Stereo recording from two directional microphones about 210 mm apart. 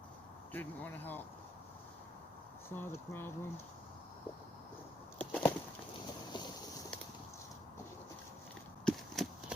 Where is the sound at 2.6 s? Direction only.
10° left (ahead or behind).